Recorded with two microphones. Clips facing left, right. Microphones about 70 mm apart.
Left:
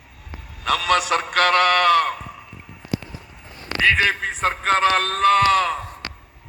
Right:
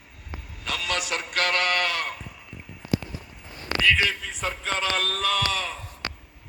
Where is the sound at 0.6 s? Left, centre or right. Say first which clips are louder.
Left 10 dB; left.